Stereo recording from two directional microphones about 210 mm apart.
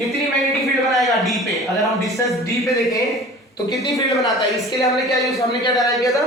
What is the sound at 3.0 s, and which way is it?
A man's voice, centre (ahead or behind).